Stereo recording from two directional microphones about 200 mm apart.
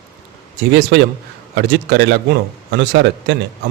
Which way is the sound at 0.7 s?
60° right (ahead or behind).